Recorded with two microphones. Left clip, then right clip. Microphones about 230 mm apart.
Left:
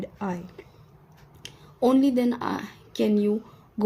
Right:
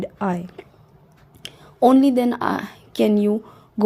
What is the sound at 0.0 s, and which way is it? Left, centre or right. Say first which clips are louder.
A woman's voice: right 8 dB; right.